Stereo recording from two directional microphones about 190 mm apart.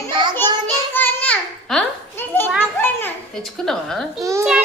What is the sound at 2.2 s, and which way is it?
Children playing, 10° left (ahead or behind).